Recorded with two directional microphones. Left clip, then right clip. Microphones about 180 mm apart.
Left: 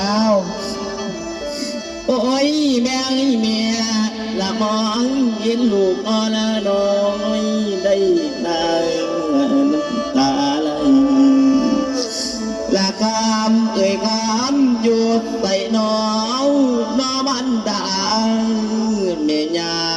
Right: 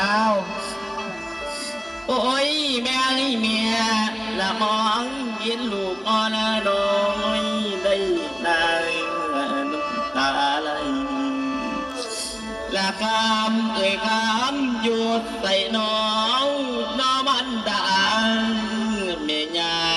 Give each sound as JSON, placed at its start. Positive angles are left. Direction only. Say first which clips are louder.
{"t": 0.0, "sound": "music", "louder": "left 2 dB", "side_deg": 35}
{"t": 2.0, "sound": "music", "louder": "left 4 dB", "side_deg": 35}
{"t": 5.5, "sound": "mantra", "louder": "left 9 dB", "side_deg": 35}
{"t": 8.4, "sound": "music", "louder": "left 1 dB", "side_deg": 35}
{"t": 12.7, "sound": "mantra", "louder": "left 3 dB", "side_deg": 35}